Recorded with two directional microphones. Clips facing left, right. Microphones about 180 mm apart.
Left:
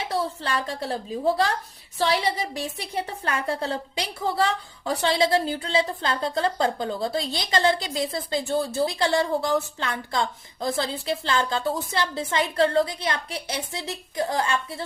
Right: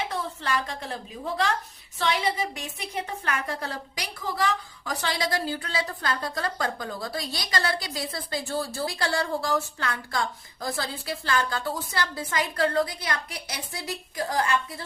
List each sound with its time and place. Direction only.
0.0 s a woman's voice: 30° left (ahead or behind)